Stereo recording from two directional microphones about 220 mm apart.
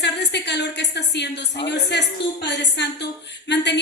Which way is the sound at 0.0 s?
50° left (ahead or behind).